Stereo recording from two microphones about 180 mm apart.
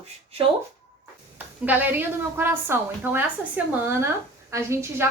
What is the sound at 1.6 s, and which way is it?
A woman's voice, 10° right (ahead or behind).